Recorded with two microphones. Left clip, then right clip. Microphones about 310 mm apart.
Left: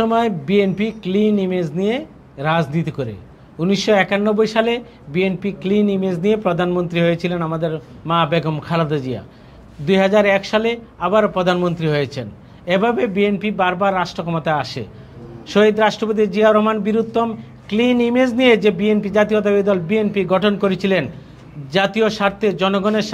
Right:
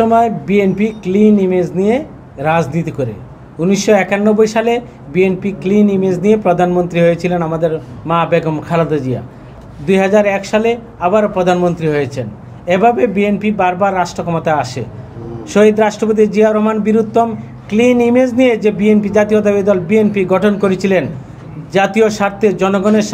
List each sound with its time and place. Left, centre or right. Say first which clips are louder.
0.0 s a man's voice: right 6 dB; left